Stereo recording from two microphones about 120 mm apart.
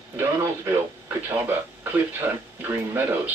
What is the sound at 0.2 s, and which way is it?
Speech, 20° right (ahead or behind).